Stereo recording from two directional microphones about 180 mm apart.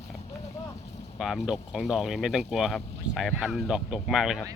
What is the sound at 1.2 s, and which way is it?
Speech, centre (ahead or behind).